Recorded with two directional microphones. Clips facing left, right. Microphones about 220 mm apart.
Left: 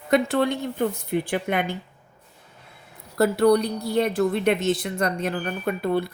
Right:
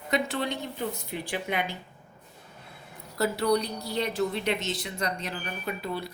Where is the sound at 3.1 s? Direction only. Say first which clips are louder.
Left 7 dB; 55° left (ahead or behind).